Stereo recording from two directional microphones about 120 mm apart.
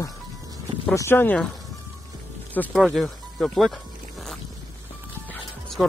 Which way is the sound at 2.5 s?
15° left (ahead or behind).